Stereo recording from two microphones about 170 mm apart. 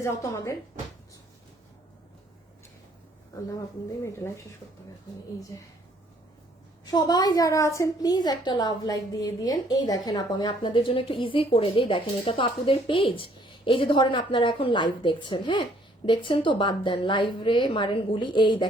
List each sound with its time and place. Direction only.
0.0 s speech: 15° left (ahead or behind)
5.5 s speech: 15° left (ahead or behind)
6.8 s a woman's voice: 25° left (ahead or behind)